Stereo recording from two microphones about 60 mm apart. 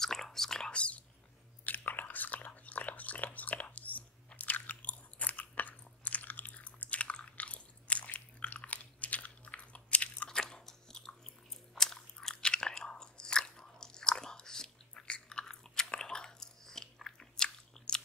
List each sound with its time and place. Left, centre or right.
0.0 s whispering: centre
1.7 s biting: left
10.3 s biting: centre